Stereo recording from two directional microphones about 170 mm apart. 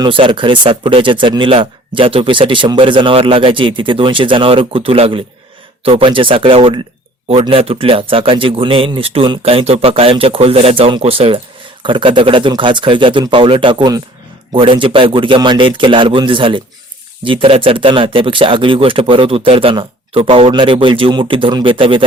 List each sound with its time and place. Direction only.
0.0 s speech: 30° right (ahead or behind)